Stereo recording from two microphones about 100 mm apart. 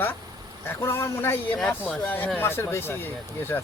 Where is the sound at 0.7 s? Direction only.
25° left (ahead or behind).